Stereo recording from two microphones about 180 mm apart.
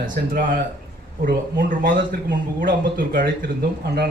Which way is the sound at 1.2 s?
50° right (ahead or behind).